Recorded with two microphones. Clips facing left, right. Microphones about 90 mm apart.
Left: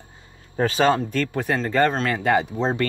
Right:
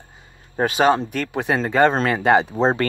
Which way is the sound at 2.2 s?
25° right (ahead or behind).